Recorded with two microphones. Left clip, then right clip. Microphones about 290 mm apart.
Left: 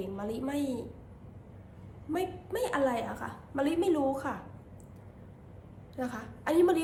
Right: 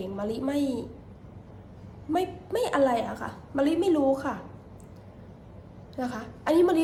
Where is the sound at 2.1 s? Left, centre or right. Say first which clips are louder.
Right 6 dB; centre.